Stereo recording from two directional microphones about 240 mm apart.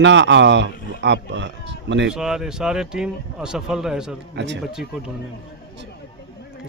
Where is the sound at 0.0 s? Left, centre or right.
Right.